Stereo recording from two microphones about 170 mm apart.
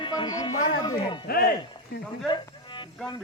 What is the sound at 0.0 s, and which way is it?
Music, 25° left (ahead or behind).